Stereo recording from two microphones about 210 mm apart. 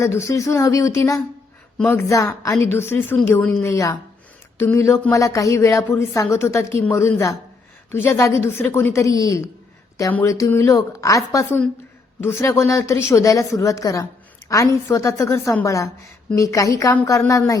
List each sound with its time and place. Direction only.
0.0 s a woman's voice: 15° left (ahead or behind)